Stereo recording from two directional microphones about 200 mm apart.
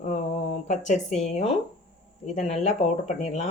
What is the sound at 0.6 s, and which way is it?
Speech, 35° left (ahead or behind).